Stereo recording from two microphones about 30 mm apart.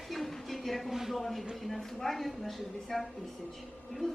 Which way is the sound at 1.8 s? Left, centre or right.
Centre.